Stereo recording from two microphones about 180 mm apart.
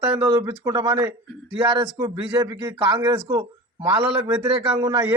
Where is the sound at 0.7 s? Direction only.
25° right (ahead or behind).